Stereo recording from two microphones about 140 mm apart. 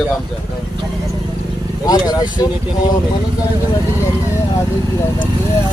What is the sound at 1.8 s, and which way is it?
Speech, 25° left (ahead or behind).